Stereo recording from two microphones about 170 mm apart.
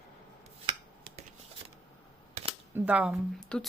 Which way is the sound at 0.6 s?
35° right (ahead or behind).